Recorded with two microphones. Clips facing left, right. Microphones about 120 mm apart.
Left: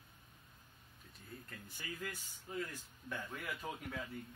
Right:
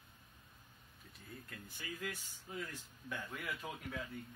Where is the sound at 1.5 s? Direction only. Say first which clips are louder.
Right 1 dB; centre (ahead or behind).